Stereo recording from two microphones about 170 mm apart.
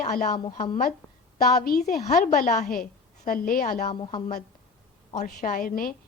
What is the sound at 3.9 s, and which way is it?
Speech, 30° left (ahead or behind).